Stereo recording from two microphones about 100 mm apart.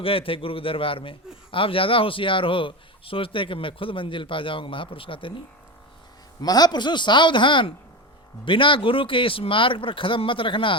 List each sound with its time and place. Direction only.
0.0 s a man's voice: 65° left (ahead or behind)
6.4 s a man's voice: 40° left (ahead or behind); by 10.8 s 60° left (ahead or behind)